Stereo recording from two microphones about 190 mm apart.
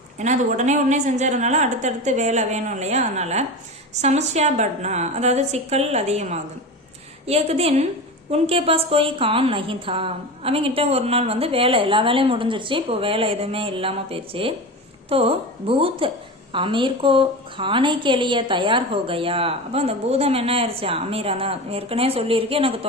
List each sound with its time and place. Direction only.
0.2 s a woman's voice: 40° right (ahead or behind)